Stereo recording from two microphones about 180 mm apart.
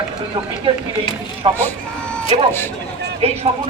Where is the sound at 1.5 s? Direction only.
10° left (ahead or behind).